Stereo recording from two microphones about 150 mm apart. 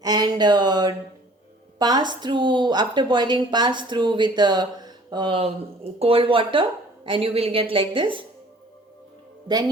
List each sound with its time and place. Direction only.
0.0 s a woman's voice: 25° right (ahead or behind)